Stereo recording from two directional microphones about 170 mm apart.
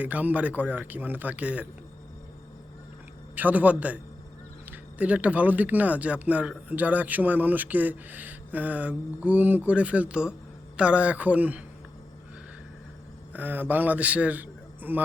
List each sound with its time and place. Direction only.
0.0 s speech: 10° right (ahead or behind)
3.3 s speech: 10° right (ahead or behind)
13.3 s a man's voice: 10° right (ahead or behind)